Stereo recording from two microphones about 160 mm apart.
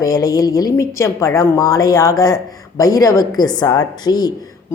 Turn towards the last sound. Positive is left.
turn(degrees=25)  # may be behind; listen again after turning